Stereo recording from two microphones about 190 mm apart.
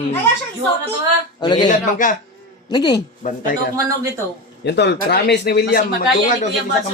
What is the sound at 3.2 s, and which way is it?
Speech, 40° left (ahead or behind).